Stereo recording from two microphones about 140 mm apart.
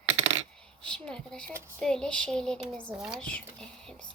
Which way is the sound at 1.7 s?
5° left (ahead or behind).